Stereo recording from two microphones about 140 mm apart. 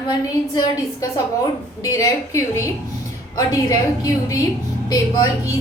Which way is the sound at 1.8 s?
25° left (ahead or behind).